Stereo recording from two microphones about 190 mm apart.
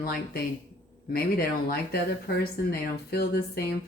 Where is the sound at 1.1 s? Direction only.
50° left (ahead or behind).